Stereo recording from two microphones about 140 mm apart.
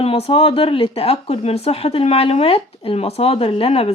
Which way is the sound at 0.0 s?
45° left (ahead or behind).